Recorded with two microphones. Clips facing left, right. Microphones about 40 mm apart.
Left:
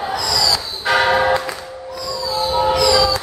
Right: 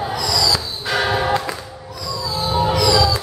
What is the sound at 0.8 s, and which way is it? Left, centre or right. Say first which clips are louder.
Church bell: left 5 dB; centre.